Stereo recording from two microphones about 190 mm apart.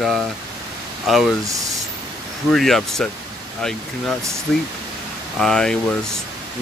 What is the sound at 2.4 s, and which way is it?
Speech, centre (ahead or behind).